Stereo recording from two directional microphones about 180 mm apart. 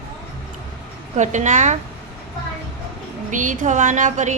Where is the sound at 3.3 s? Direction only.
45° right (ahead or behind).